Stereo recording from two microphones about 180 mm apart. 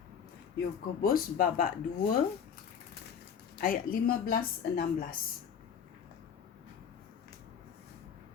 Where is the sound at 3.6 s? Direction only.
55° left (ahead or behind).